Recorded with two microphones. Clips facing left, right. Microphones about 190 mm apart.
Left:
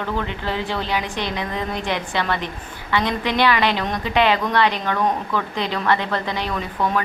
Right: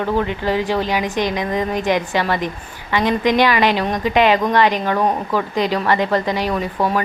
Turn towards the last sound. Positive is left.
turn(degrees=-35)  # may be behind; listen again after turning